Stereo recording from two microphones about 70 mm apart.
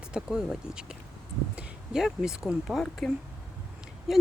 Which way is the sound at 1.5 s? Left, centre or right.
Centre.